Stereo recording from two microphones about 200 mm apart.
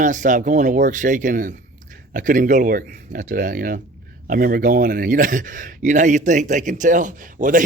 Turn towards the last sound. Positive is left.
turn(degrees=-40)  # may be behind; listen again after turning